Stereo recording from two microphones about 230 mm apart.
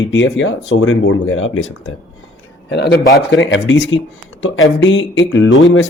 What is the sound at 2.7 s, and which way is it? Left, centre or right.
Speech, left.